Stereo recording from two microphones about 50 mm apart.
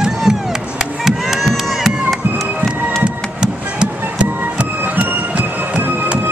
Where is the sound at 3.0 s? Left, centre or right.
Centre.